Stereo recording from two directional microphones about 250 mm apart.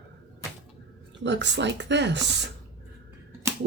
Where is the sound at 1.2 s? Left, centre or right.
Right.